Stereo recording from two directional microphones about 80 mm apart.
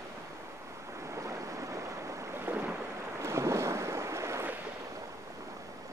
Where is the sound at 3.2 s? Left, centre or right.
Right.